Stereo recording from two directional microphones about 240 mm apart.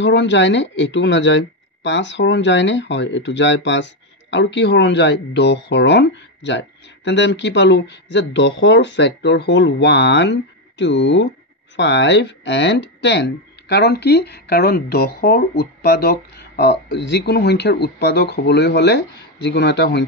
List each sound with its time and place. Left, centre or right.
0.0 s speech: left